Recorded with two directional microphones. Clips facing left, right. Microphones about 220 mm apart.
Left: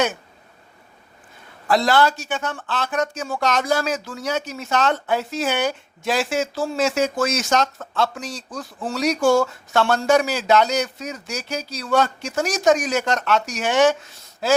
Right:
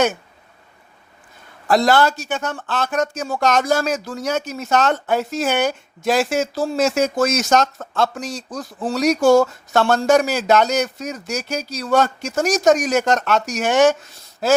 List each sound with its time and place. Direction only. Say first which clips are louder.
1.6 s speech: right 2 dB; 45° right (ahead or behind)